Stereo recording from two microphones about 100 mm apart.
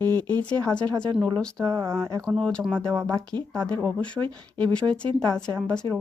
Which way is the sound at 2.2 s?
5° left (ahead or behind).